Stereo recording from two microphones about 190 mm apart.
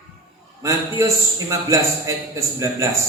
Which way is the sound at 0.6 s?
15° right (ahead or behind).